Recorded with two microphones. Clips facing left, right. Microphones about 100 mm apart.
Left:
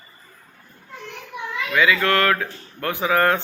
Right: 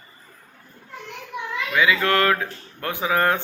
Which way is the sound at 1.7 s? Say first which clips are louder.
Left 1 dB; 20° right (ahead or behind).